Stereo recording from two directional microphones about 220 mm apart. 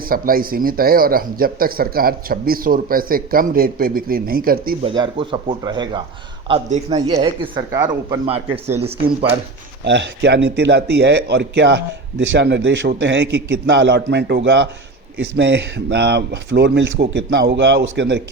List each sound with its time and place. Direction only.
0.1 s speech: 40° right (ahead or behind)
4.8 s speech: 25° right (ahead or behind)
6.5 s speech: 30° right (ahead or behind)
6.9 s speech: 20° right (ahead or behind)
9.8 s speech: 55° right (ahead or behind)